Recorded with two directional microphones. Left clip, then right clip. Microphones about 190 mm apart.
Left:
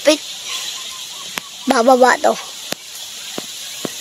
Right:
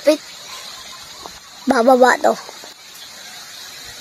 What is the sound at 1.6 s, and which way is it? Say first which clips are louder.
Speech: left 1 dB; 5° left (ahead or behind).